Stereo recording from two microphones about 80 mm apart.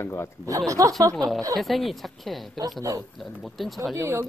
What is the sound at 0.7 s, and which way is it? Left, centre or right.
Speech, right.